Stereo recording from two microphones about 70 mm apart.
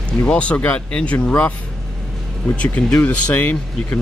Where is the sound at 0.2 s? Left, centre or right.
Centre.